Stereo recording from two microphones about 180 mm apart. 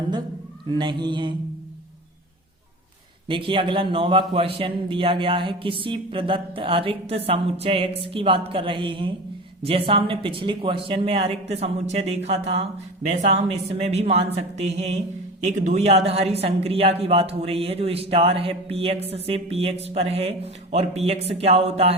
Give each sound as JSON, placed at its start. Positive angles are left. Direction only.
{"t": 0.8, "sound": "a man's voice", "side_deg": -25}
{"t": 3.2, "sound": "a man's voice", "side_deg": -25}